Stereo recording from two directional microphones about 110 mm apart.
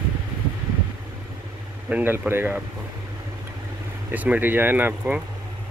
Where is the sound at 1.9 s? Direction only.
20° right (ahead or behind).